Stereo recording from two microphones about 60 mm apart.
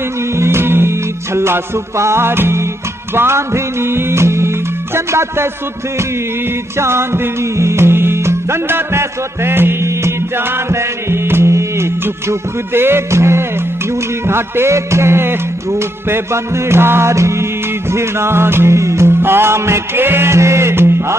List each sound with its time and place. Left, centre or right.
0.4 s music: right
6.8 s music: right
18.8 s music: right